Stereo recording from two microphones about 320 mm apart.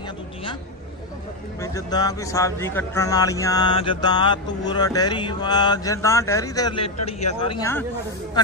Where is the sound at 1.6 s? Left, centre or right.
Centre.